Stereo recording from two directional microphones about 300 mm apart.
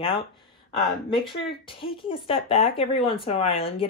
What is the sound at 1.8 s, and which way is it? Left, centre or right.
Speech, centre.